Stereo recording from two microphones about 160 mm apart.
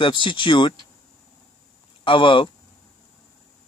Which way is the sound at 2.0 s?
30° left (ahead or behind).